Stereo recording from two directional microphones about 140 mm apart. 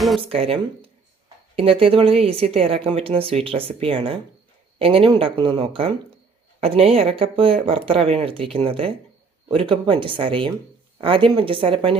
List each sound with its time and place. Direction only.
0.2 s speech: 45° right (ahead or behind)